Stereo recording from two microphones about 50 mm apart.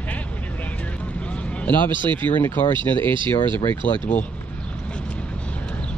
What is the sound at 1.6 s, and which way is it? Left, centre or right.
Speech, left.